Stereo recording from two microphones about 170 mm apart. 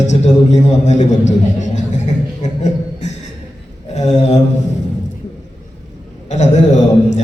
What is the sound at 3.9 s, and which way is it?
Mantra, 40° left (ahead or behind).